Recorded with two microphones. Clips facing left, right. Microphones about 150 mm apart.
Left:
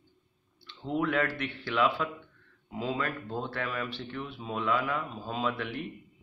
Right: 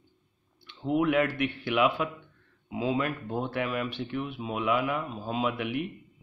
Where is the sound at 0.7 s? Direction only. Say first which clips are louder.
Right 4 dB; 15° right (ahead or behind).